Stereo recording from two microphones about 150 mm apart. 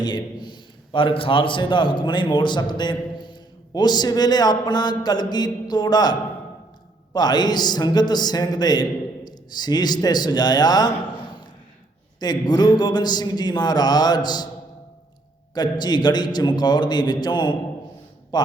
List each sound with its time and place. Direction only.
0.0 s a man's voice: 25° left (ahead or behind)
12.2 s a man's voice: 25° left (ahead or behind)
15.5 s a man's voice: 30° left (ahead or behind)